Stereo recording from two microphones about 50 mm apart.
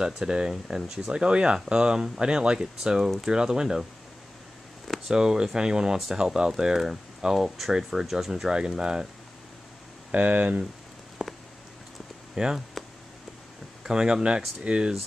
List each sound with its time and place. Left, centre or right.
0.0 s speech: centre
4.8 s a sound: centre
5.1 s speech: centre
10.1 s speech: right
11.2 s a sound: centre
12.4 s speech: centre
13.8 s speech: centre